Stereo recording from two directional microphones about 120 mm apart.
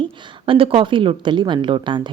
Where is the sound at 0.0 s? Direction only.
45° right (ahead or behind).